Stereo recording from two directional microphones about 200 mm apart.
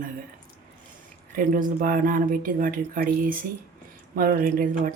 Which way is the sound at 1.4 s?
40° right (ahead or behind).